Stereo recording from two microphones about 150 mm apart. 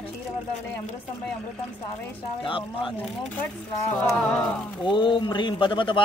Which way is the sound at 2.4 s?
35° left (ahead or behind).